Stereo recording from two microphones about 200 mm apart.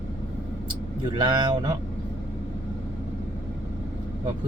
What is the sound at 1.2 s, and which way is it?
Speech, 20° right (ahead or behind).